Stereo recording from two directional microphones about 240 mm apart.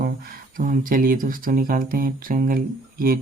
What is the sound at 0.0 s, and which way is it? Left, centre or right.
Speech, right.